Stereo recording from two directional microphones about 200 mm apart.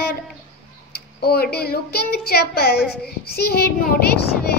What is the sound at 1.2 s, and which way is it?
A woman's voice, 50° left (ahead or behind).